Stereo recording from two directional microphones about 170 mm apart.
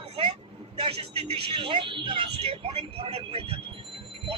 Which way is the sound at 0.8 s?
35° right (ahead or behind).